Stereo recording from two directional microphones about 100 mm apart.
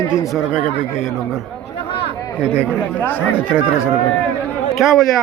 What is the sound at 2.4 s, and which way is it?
Speech, 15° right (ahead or behind).